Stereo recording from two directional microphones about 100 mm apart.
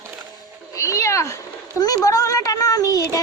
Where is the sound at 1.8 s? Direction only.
40° left (ahead or behind).